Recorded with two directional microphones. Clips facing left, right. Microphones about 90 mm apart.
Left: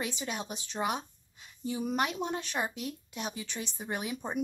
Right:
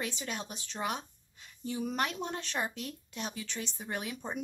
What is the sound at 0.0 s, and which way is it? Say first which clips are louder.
Speech: left 2 dB; 15° left (ahead or behind).